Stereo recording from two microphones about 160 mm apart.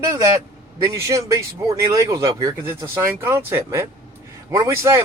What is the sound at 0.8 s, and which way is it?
Speech, 20° right (ahead or behind).